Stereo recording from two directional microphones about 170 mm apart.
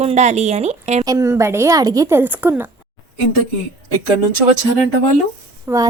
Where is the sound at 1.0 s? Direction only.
20° right (ahead or behind).